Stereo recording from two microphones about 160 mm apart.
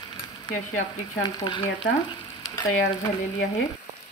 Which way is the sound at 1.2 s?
30° left (ahead or behind).